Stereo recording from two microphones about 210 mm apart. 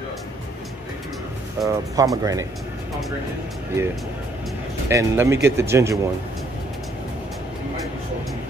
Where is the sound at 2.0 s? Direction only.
15° right (ahead or behind).